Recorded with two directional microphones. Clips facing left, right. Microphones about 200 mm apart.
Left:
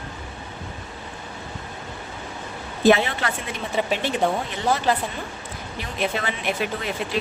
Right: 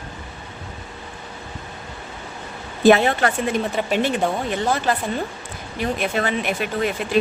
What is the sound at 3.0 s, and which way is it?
Speech, 50° right (ahead or behind).